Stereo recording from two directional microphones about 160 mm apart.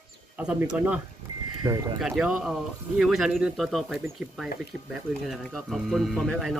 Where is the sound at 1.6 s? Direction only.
25° right (ahead or behind).